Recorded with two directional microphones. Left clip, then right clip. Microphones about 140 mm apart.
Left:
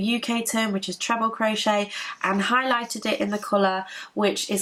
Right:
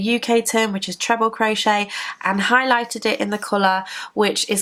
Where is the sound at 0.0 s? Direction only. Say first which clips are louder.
Right 8 dB; 35° right (ahead or behind).